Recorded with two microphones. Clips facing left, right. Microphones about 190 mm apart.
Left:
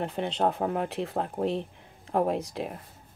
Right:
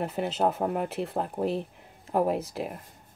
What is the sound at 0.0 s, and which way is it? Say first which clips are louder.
Speech: right 1 dB; 5° right (ahead or behind).